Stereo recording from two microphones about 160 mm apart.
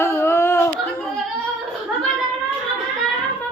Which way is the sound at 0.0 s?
15° left (ahead or behind).